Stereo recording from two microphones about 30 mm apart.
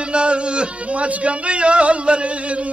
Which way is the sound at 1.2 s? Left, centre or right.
Right.